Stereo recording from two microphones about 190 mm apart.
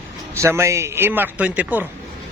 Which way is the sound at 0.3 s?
15° right (ahead or behind).